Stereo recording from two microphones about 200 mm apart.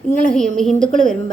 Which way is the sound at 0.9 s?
40° right (ahead or behind).